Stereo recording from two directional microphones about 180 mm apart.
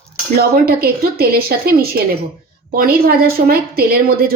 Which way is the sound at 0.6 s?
60° right (ahead or behind).